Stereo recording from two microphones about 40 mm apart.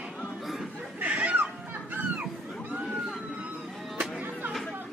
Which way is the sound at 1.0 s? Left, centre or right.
Right.